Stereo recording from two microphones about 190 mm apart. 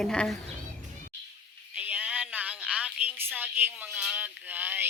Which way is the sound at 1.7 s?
10° right (ahead or behind).